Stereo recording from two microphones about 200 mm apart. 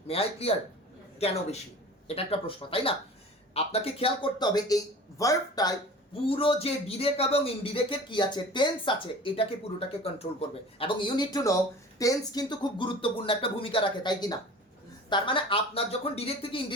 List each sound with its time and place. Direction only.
0.1 s a woman's voice: 30° left (ahead or behind)
10.5 s speech: 25° left (ahead or behind)